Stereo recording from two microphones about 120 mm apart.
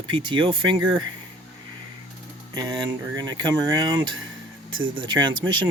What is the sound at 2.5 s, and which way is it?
Speech, 35° right (ahead or behind).